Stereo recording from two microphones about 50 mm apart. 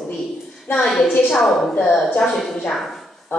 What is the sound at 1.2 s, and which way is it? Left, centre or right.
A woman's voice, centre.